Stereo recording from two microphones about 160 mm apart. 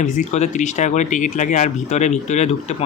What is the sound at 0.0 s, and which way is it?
Speech, 50° left (ahead or behind).